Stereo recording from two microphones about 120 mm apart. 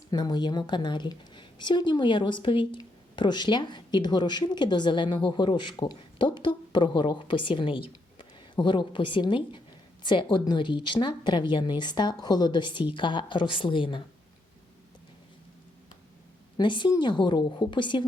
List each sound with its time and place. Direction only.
0.1 s a woman's voice: 35° left (ahead or behind)
16.6 s a woman's voice: 40° left (ahead or behind)